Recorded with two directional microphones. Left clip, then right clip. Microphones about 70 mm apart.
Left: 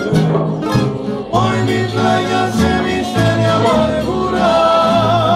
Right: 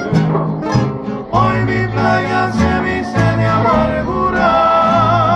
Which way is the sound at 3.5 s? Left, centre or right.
Centre.